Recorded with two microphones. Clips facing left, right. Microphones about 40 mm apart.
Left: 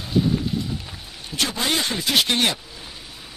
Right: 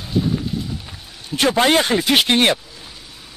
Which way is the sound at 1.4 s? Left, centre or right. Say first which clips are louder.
Right 9 dB; right.